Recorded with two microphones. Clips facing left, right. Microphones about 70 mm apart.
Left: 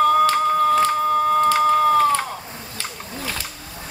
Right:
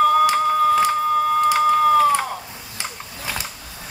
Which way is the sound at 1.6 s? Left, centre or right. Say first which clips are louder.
Right 1 dB; centre.